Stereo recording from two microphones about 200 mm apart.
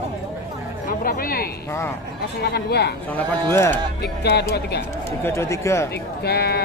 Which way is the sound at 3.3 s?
10° left (ahead or behind).